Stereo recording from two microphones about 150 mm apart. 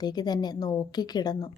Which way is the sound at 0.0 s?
25° left (ahead or behind).